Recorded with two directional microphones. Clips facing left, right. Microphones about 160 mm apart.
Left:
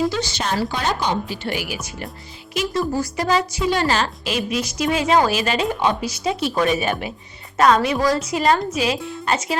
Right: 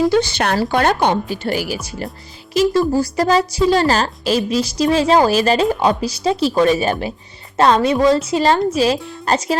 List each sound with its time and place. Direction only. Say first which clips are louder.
0.1 s speech: right 7 dB; 55° right (ahead or behind)
1.5 s a woman's voice: right 5 dB; 35° right (ahead or behind)